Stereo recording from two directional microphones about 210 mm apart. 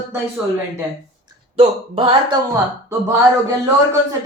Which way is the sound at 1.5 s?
25° right (ahead or behind).